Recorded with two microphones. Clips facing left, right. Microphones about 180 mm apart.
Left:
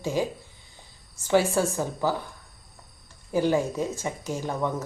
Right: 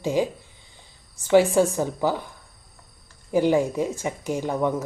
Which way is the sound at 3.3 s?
15° right (ahead or behind).